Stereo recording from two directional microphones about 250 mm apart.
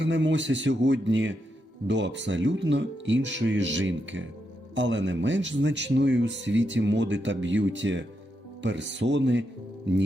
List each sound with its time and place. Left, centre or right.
0.0 s speech: right